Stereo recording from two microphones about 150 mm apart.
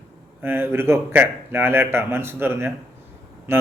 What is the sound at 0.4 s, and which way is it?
A man's voice, 15° right (ahead or behind).